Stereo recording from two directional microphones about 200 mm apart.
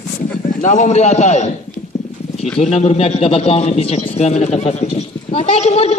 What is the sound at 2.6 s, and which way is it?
A man's voice, 30° left (ahead or behind).